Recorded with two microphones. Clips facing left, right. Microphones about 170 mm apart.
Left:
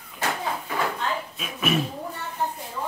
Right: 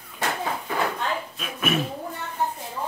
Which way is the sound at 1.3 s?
Centre (ahead or behind).